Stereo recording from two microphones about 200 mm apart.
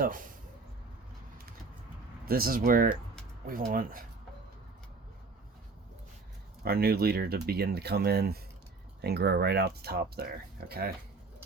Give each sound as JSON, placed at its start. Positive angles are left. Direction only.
{"t": 2.2, "sound": "speech", "side_deg": -50}
{"t": 6.7, "sound": "speech", "side_deg": -50}